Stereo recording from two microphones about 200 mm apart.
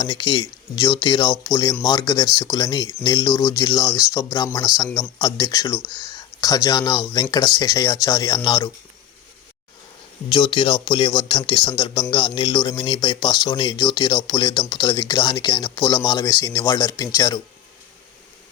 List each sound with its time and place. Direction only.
0.0 s speech: 25° left (ahead or behind)
10.2 s speech: 25° left (ahead or behind)